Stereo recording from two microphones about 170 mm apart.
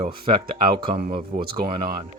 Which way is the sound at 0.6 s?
30° right (ahead or behind).